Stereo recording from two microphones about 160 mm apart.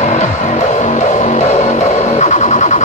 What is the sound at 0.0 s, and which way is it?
Music, 45° left (ahead or behind).